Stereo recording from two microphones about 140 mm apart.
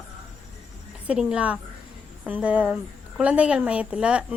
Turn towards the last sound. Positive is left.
turn(degrees=-10)  # may be behind; listen again after turning